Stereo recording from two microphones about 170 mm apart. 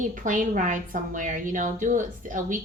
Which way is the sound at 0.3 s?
50° right (ahead or behind).